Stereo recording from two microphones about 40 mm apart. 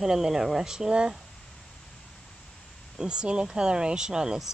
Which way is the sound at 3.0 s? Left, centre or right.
Right.